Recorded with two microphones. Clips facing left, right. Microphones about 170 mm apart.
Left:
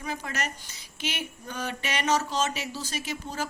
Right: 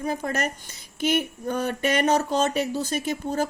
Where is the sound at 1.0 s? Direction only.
50° right (ahead or behind).